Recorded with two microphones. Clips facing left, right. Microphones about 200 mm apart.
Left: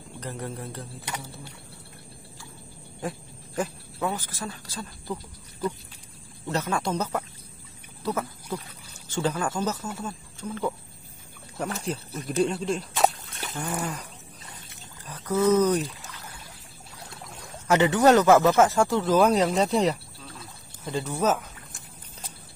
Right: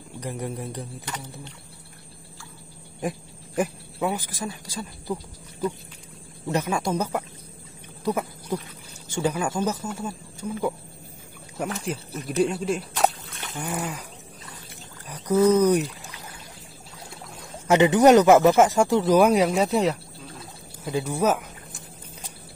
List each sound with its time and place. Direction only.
0.2 s speech: 15° right (ahead or behind)
1.0 s speech: 10° left (ahead or behind)
3.0 s speech: 15° right (ahead or behind)
8.0 s a sound: 15° right (ahead or behind)
9.1 s speech: 10° right (ahead or behind)
11.8 s speech: 10° right (ahead or behind)
15.0 s a sound: 15° right (ahead or behind)
17.6 s speech: 20° right (ahead or behind)